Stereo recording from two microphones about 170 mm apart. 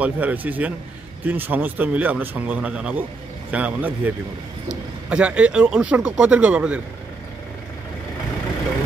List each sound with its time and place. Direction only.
0.0 s speech: 10° right (ahead or behind)
5.1 s speech: 5° right (ahead or behind)